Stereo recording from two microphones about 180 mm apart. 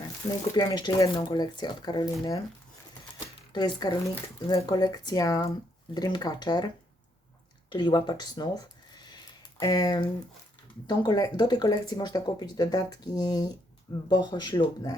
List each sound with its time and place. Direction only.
0.3 s speech: 20° left (ahead or behind)
3.5 s speech: 25° left (ahead or behind)
7.7 s speech: 25° left (ahead or behind)